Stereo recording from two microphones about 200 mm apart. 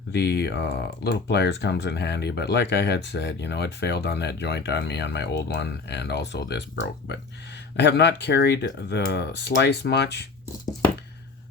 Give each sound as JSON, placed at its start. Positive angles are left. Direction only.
{"t": 0.1, "sound": "speech", "side_deg": 55}
{"t": 7.8, "sound": "speech", "side_deg": 60}